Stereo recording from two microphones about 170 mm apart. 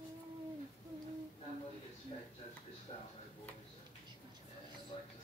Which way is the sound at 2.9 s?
30° left (ahead or behind).